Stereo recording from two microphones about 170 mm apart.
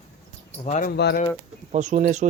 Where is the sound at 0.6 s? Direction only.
45° left (ahead or behind).